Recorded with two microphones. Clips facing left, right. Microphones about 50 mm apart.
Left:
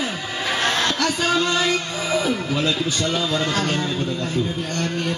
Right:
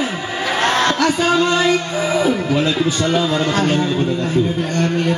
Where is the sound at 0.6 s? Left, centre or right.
Right.